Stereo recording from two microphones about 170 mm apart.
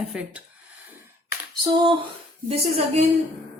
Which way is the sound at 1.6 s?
25° right (ahead or behind).